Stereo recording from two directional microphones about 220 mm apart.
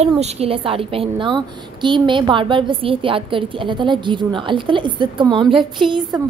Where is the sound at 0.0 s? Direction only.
30° right (ahead or behind).